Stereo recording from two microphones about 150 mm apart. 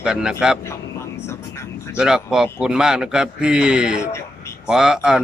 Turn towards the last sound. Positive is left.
turn(degrees=-5)  # may be behind; listen again after turning